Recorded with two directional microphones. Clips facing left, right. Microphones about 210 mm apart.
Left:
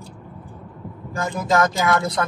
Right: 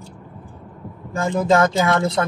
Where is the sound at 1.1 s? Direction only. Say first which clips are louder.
Right 4 dB; 30° right (ahead or behind).